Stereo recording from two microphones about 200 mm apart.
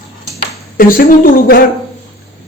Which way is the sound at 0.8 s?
45° left (ahead or behind).